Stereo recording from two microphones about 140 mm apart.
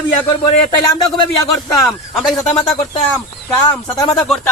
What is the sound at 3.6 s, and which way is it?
Speech, 30° left (ahead or behind).